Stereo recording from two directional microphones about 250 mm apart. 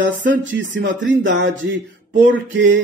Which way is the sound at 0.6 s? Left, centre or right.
Right.